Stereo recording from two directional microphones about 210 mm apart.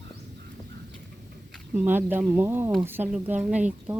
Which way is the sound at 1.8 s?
10° right (ahead or behind).